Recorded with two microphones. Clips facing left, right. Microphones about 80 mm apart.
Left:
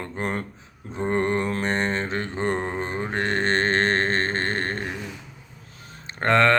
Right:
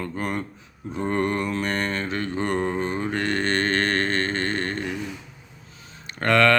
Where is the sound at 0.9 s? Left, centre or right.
Left.